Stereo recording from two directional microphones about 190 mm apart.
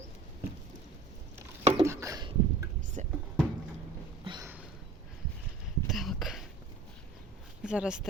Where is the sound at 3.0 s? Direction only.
35° right (ahead or behind).